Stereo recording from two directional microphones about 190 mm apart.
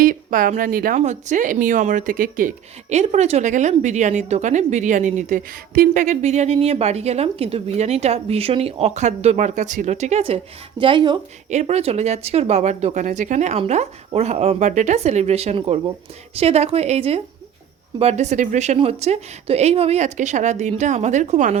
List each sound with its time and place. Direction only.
0.0 s speech: 45° right (ahead or behind)
2.9 s a woman's voice: 35° right (ahead or behind)